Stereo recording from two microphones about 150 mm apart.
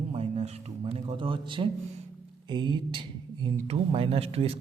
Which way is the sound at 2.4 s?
30° right (ahead or behind).